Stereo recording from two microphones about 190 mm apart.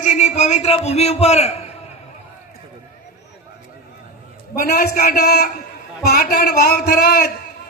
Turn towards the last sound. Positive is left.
turn(degrees=60)  # may be behind; listen again after turning